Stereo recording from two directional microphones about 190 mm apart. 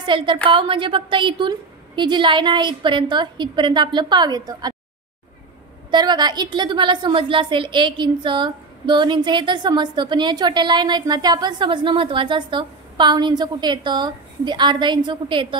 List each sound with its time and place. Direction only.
0.0 s a woman's voice: 25° right (ahead or behind)
5.9 s a woman's voice: 25° right (ahead or behind)